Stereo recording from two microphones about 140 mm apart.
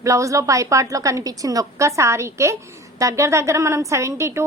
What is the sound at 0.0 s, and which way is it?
A woman's voice, 20° right (ahead or behind).